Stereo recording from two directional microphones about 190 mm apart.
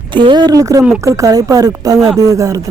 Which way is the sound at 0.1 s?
25° right (ahead or behind).